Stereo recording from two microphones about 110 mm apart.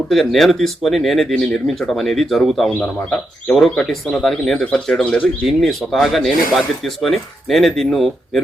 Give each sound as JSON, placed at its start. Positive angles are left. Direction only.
{"t": 0.1, "sound": "speech", "side_deg": 0}